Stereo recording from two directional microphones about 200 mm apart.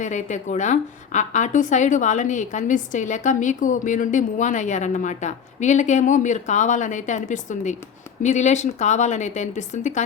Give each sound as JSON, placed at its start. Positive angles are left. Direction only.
{"t": 0.0, "sound": "a woman's voice", "side_deg": 35}